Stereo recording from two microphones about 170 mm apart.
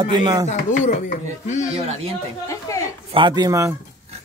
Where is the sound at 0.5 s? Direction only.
45° left (ahead or behind).